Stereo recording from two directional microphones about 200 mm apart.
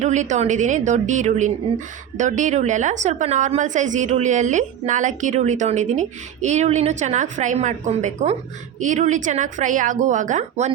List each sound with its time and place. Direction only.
0.0 s a woman's voice: 35° right (ahead or behind)